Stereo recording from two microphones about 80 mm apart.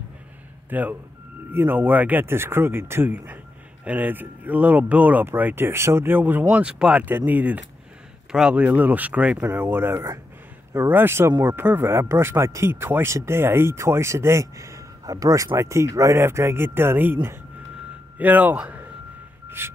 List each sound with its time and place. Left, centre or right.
0.7 s speech: right
6.5 s speech: centre
7.1 s speech: right